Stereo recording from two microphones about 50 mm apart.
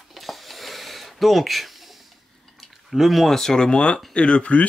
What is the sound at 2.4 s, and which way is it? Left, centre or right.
Speech, centre.